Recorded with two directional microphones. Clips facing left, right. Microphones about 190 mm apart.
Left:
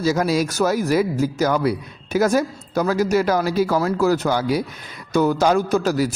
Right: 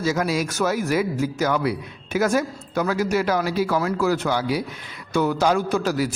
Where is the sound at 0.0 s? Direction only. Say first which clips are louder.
Left 3 dB; 35° left (ahead or behind).